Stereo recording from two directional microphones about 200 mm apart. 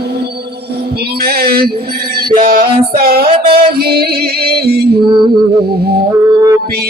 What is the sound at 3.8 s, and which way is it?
Music, 50° right (ahead or behind).